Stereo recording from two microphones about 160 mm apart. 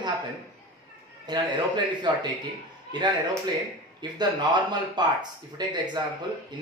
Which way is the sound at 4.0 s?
25° right (ahead or behind).